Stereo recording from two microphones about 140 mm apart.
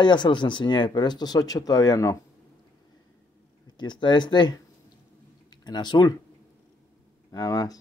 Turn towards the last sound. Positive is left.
turn(degrees=25)  # may be behind; listen again after turning